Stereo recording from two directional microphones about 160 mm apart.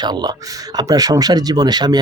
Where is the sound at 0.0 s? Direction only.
25° right (ahead or behind).